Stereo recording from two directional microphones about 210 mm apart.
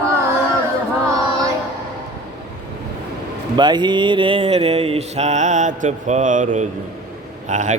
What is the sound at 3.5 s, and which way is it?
Mantra, 20° right (ahead or behind).